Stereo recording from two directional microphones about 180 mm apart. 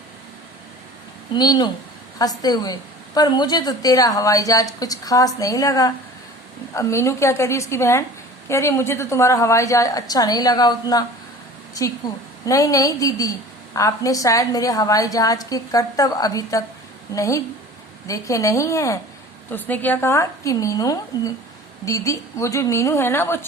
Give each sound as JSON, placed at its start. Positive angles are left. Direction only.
{"t": 1.3, "sound": "a woman's voice", "side_deg": 20}
{"t": 12.5, "sound": "a woman's voice", "side_deg": 20}